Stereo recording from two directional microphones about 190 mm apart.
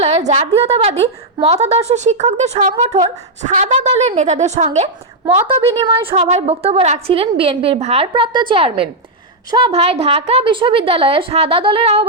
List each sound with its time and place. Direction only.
0.0 s a woman's voice: 35° right (ahead or behind)
5.2 s a woman's voice: 15° right (ahead or behind)
5.5 s a woman's voice: 30° right (ahead or behind)